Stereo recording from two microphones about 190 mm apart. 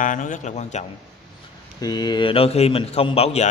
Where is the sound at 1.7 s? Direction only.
20° left (ahead or behind).